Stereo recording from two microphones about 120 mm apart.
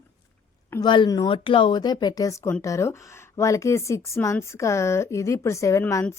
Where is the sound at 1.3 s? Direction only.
45° left (ahead or behind).